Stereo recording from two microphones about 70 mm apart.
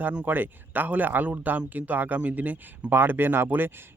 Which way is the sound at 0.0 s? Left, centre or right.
Right.